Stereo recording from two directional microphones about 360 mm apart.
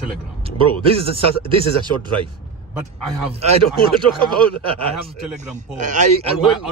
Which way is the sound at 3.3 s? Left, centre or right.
Centre.